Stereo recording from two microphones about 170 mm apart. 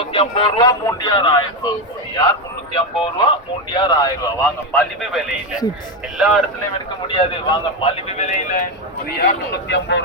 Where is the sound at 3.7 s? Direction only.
25° left (ahead or behind).